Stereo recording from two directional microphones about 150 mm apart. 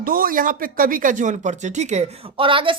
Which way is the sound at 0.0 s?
70° right (ahead or behind).